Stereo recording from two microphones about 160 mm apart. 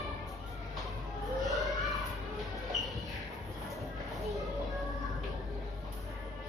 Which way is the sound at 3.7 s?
Centre (ahead or behind).